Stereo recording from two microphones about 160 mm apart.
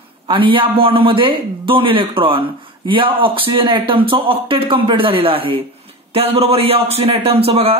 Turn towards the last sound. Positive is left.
turn(degrees=-40)  # may be behind; listen again after turning